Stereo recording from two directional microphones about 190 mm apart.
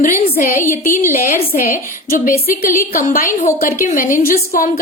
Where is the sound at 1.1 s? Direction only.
45° left (ahead or behind).